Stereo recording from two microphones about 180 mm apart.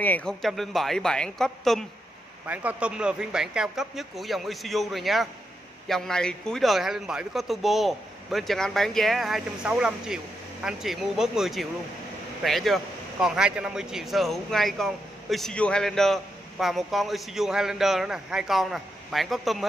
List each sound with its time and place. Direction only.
0.0 s a man's voice: 5° left (ahead or behind)
2.4 s a man's voice: 10° right (ahead or behind)